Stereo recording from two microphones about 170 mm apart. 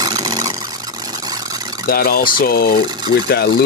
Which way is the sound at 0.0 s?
20° right (ahead or behind).